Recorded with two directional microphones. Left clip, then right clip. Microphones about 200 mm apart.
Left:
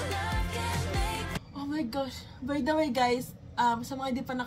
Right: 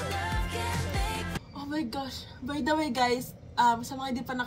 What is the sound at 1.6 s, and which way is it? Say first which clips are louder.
A woman's voice: left 1 dB; 25° right (ahead or behind).